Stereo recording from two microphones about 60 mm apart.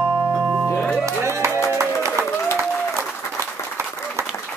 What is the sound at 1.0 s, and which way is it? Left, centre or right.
Music, right.